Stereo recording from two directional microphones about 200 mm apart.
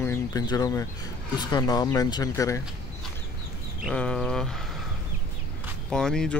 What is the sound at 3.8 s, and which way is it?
Speech, 5° left (ahead or behind).